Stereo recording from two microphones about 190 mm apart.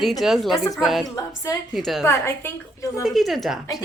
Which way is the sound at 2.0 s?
15° left (ahead or behind).